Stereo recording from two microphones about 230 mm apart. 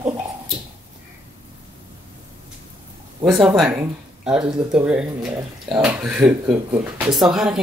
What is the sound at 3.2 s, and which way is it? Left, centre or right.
Speech, centre.